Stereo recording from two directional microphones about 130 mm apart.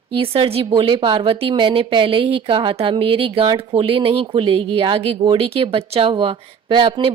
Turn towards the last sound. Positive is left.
turn(degrees=-40)  # may be behind; listen again after turning